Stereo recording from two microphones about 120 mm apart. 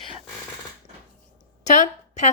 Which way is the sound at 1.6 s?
85° left.